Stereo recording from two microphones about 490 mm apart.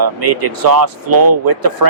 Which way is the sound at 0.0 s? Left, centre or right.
Right.